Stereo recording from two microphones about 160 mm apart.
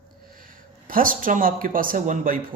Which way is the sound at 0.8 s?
60° right (ahead or behind).